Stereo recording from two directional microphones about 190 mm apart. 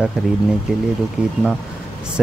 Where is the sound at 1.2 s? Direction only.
5° right (ahead or behind).